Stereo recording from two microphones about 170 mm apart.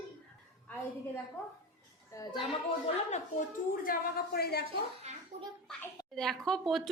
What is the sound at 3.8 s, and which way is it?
Speech, 65° left (ahead or behind).